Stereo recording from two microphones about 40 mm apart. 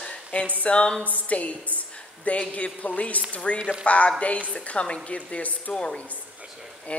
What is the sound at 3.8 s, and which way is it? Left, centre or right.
Speech, left.